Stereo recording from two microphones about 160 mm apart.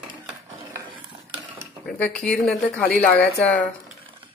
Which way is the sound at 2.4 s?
5° left (ahead or behind).